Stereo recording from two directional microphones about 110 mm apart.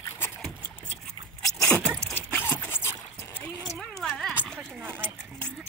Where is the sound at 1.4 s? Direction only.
5° left (ahead or behind).